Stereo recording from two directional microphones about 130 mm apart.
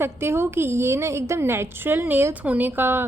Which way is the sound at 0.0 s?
20° right (ahead or behind).